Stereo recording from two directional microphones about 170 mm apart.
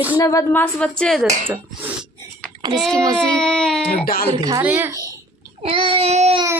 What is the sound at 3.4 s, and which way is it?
Speech, 5° left (ahead or behind).